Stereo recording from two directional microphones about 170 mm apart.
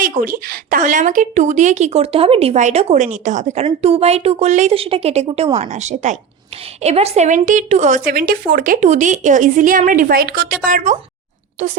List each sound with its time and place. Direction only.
0.0 s speech: 55° right (ahead or behind)